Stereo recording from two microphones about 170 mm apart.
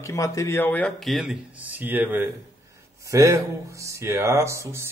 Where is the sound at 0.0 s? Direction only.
20° left (ahead or behind).